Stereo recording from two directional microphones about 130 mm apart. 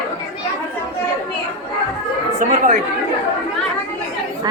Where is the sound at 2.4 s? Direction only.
80° right.